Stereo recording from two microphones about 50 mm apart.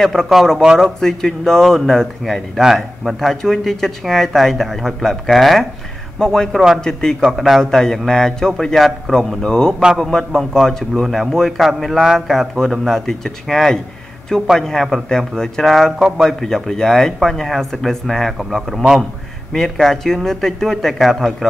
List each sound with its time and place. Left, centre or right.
0.0 s speech: centre
6.1 s speech: centre
7.2 s speech: centre
19.5 s speech: centre